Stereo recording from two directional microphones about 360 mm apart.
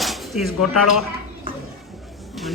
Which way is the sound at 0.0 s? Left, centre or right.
Centre.